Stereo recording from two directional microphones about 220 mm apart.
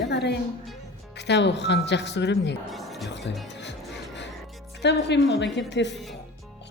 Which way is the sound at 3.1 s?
55° left (ahead or behind).